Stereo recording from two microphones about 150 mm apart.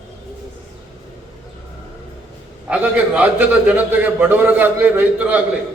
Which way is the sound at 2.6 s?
5° right (ahead or behind).